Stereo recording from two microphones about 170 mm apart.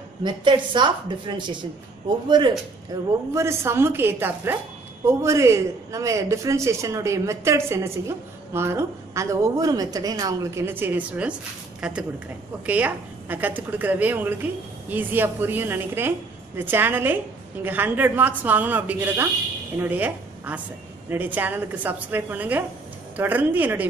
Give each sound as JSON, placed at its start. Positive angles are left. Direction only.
{"t": 0.2, "sound": "a woman's voice", "side_deg": -25}
{"t": 2.9, "sound": "a woman's voice", "side_deg": -15}